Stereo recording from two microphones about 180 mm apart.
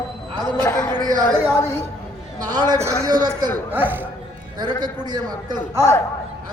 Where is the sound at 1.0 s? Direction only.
20° right (ahead or behind).